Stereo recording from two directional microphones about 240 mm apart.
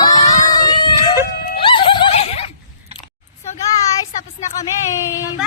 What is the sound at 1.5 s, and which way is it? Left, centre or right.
Neigh, left.